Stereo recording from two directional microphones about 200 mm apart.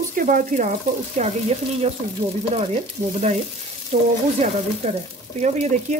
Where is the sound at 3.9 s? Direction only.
35° right (ahead or behind).